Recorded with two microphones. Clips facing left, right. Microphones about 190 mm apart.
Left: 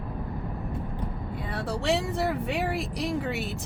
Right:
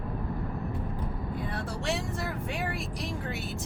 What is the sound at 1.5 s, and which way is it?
Vehicle, 65° left (ahead or behind).